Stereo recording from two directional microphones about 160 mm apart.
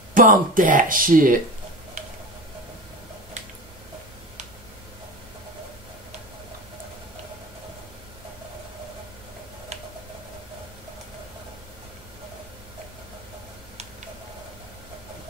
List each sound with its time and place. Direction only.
0.1 s speech: 55° right (ahead or behind)